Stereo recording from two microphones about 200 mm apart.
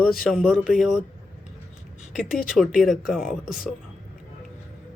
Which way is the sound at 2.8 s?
Centre (ahead or behind).